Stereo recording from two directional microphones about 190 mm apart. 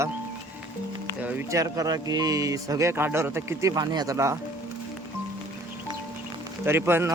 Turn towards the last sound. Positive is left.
turn(degrees=-10)  # may be behind; listen again after turning